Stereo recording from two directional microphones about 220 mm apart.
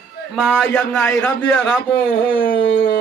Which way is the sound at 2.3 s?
5° left (ahead or behind).